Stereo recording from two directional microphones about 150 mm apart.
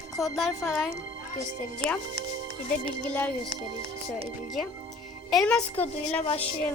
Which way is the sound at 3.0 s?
10° left (ahead or behind).